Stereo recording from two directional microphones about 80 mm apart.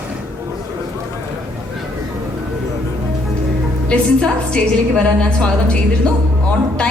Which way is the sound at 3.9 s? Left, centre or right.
Centre.